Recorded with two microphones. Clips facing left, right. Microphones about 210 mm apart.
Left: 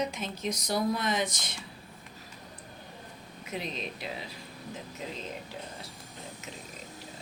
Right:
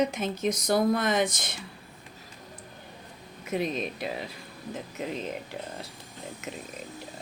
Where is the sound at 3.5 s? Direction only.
50° right (ahead or behind).